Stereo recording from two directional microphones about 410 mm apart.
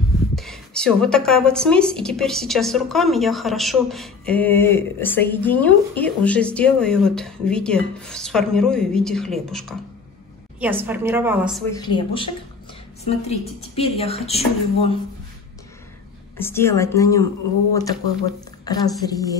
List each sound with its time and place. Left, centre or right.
0.4 s a woman's voice: centre
11.7 s a woman's voice: centre
16.3 s a woman's voice: centre
18.7 s a woman's voice: centre